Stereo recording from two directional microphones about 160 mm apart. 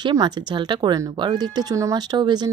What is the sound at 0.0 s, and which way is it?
Speech, 25° right (ahead or behind).